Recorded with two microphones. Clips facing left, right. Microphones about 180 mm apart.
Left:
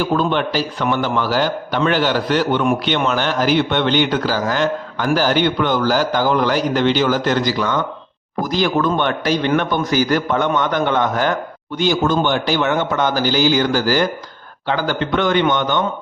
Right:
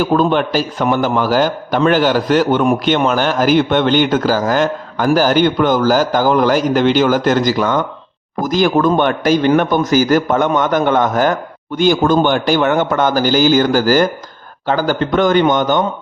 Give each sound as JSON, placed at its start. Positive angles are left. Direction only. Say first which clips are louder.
{"t": 0.0, "sound": "a man's voice", "louder": "right 4 dB", "side_deg": -45}